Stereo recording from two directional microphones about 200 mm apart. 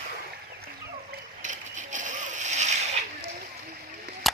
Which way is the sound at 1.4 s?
40° right (ahead or behind).